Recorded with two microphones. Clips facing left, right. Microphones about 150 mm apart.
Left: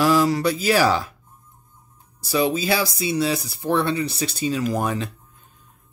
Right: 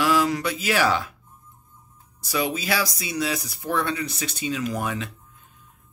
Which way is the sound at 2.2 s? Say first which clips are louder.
Left 5 dB; 30° left (ahead or behind).